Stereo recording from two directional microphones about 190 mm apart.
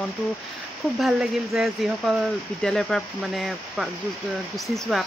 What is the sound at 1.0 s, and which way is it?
Speech, 5° right (ahead or behind).